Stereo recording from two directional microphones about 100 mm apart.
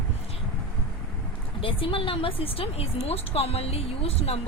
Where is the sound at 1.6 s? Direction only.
60° left (ahead or behind).